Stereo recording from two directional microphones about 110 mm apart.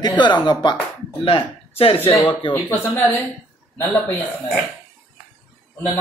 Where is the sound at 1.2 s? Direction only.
60° left (ahead or behind).